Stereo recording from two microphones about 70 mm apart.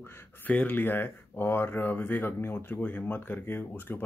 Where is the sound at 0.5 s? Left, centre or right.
Left.